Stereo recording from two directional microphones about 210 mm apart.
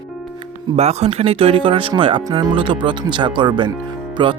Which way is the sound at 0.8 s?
30° right (ahead or behind).